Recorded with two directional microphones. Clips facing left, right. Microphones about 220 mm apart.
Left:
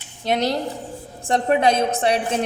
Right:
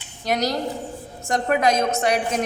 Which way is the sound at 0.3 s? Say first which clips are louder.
Left 1 dB; 25° left (ahead or behind).